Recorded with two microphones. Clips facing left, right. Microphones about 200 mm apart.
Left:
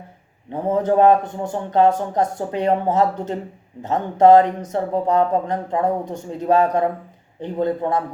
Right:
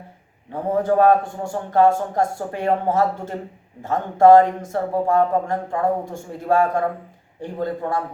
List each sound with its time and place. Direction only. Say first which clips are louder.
0.7 s speech: left 1 dB; 20° left (ahead or behind)